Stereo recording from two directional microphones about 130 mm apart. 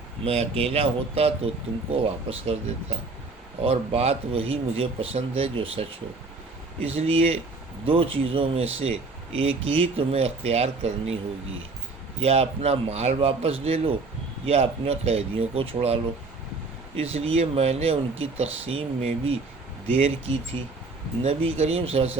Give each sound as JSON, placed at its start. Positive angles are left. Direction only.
{"t": 0.3, "sound": "speech", "side_deg": -50}
{"t": 3.6, "sound": "speech", "side_deg": -50}
{"t": 12.2, "sound": "speech", "side_deg": -50}
{"t": 17.0, "sound": "speech", "side_deg": -50}